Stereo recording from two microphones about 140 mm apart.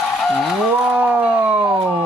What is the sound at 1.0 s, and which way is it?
Speech, 10° right (ahead or behind).